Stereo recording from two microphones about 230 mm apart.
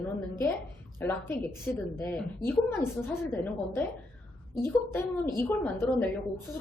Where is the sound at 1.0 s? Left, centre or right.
Centre.